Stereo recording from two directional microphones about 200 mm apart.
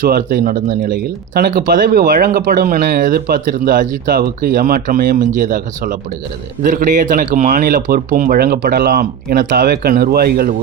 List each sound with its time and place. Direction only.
0.0 s speech: 45° right (ahead or behind)